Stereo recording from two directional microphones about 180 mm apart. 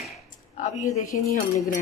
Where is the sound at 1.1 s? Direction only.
45° left (ahead or behind).